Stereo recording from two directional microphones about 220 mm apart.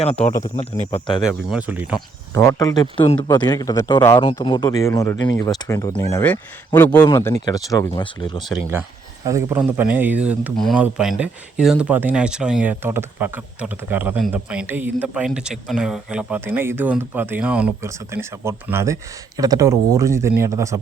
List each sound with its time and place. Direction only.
0.4 s speech: 25° left (ahead or behind)
1.3 s speech: 5° right (ahead or behind)
2.3 s speech: 10° left (ahead or behind)
8.4 s speech: centre (ahead or behind)
9.2 s speech: 10° right (ahead or behind)